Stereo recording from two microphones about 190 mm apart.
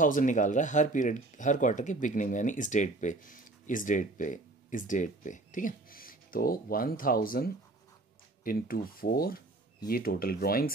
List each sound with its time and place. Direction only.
0.0 s speech: 45° left (ahead or behind)